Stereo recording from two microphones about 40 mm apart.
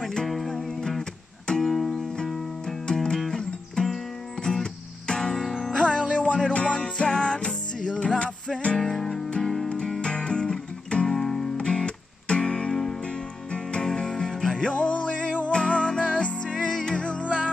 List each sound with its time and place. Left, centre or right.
0.3 s music: centre
5.8 s music: left
6.1 s music: left; by 11.5 s centre
11.5 s music: left
14.7 s music: left
16.5 s music: centre